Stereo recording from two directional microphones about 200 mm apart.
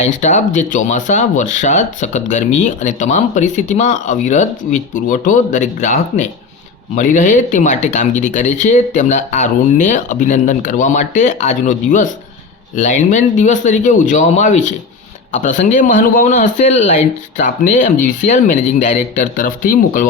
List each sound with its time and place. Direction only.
0.2 s speech: 35° left (ahead or behind)